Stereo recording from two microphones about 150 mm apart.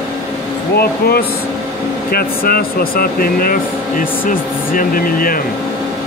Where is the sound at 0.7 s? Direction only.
90° left.